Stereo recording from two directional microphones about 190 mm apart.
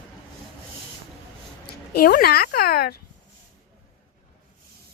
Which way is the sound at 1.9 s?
55° left (ahead or behind).